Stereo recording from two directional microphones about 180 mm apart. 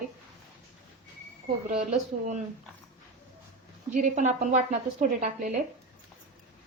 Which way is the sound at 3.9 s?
45° right (ahead or behind).